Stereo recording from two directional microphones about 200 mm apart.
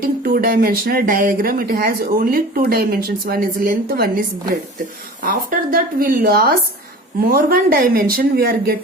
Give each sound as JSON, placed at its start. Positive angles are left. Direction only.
{"t": 0.0, "sound": "speech", "side_deg": -45}
{"t": 5.2, "sound": "speech", "side_deg": -45}